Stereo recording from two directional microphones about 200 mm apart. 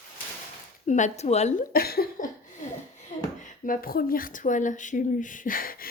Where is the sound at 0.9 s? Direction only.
35° left (ahead or behind).